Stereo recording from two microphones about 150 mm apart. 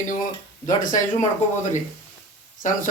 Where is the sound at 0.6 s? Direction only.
60° left (ahead or behind).